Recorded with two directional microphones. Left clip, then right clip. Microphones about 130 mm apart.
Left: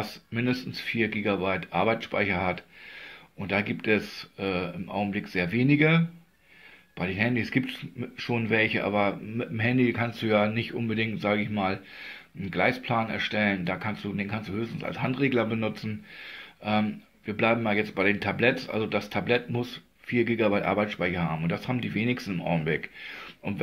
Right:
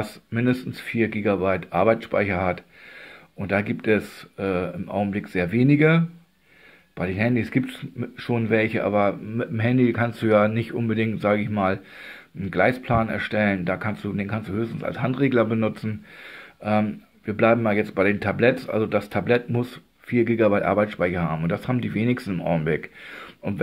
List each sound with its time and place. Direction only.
0.0 s speech: 40° right (ahead or behind)
20.1 s speech: 35° right (ahead or behind)